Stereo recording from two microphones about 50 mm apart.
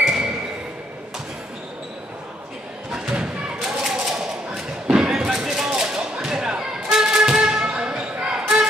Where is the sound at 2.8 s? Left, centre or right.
Centre.